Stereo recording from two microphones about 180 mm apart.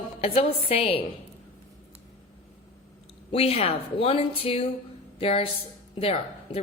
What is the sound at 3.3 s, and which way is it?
A woman's voice, 35° left (ahead or behind).